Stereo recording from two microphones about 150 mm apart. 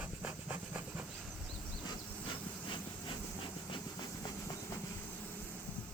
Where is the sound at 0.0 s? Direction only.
10° right (ahead or behind).